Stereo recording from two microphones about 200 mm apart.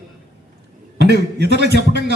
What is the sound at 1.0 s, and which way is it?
A man's voice, 55° right (ahead or behind).